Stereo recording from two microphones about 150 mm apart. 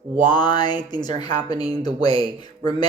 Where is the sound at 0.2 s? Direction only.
30° left (ahead or behind).